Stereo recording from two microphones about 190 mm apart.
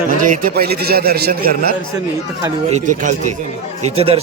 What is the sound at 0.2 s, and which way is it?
A man's voice, 45° right (ahead or behind).